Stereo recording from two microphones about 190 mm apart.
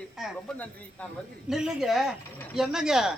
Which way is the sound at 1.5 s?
Centre (ahead or behind).